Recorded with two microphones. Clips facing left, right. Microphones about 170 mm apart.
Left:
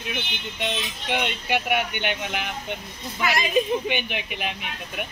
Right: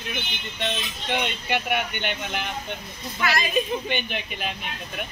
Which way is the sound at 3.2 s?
15° left (ahead or behind).